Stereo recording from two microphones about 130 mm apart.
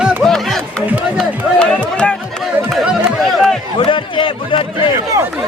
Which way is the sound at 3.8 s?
40° left (ahead or behind).